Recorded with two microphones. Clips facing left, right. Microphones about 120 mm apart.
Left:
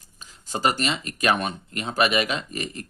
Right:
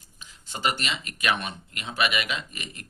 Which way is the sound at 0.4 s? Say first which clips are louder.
Left 5 dB; 40° left (ahead or behind).